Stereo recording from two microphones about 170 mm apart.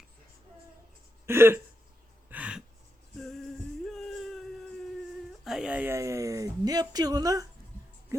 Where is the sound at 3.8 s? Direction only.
Centre (ahead or behind).